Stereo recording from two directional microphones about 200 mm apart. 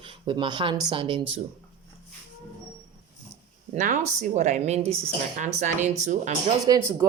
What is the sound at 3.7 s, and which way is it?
Speech, 35° right (ahead or behind).